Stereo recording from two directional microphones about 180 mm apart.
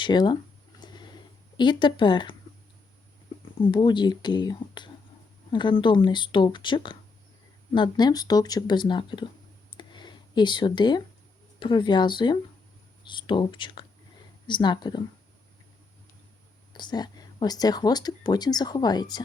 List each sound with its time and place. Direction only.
0.0 s speech: 25° left (ahead or behind)
0.8 s a sound: 25° left (ahead or behind)
1.5 s speech: 25° left (ahead or behind)
3.6 s speech: 25° left (ahead or behind)
9.7 s a sound: 25° left (ahead or behind)
11.6 s speech: 25° left (ahead or behind)
16.7 s speech: 25° left (ahead or behind)